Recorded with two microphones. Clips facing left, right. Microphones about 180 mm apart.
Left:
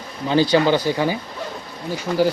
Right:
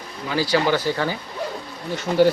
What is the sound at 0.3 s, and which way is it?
Speech, 20° left (ahead or behind).